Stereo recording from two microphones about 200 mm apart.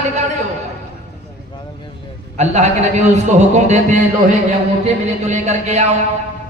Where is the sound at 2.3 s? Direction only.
35° right (ahead or behind).